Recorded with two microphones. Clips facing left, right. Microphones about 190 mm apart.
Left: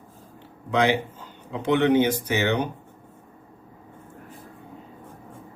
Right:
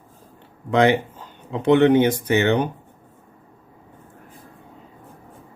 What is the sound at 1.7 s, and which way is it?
Speech, 55° right (ahead or behind).